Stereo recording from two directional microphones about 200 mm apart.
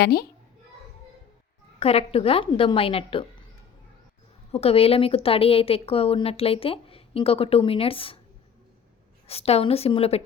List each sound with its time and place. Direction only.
0.0 s a child's voice: 50° left (ahead or behind)
1.8 s a woman's voice: 30° left (ahead or behind)
4.5 s a woman's voice: 30° left (ahead or behind)
9.2 s a woman's voice: 30° left (ahead or behind)